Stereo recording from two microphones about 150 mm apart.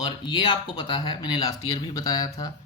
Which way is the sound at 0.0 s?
30° left (ahead or behind).